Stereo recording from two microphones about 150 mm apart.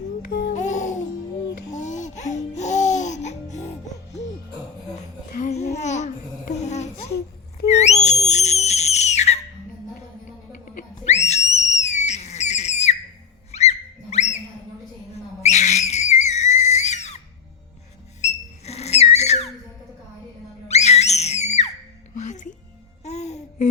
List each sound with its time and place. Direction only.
0.3 s music: 90° left
0.5 s music: 50° left (ahead or behind)
5.3 s babbling: 55° left (ahead or behind)
6.5 s a sound: 50° left (ahead or behind)
7.7 s whistle: 50° left (ahead or behind)
10.5 s a sound: 55° left (ahead or behind)
11.3 s whistle: 45° left (ahead or behind)
13.5 s a sound: 45° left (ahead or behind)
15.1 s whistle: 45° left (ahead or behind)
18.2 s whistle: 50° left (ahead or behind)
20.7 s screaming: 45° left (ahead or behind)
22.1 s music: 55° left (ahead or behind)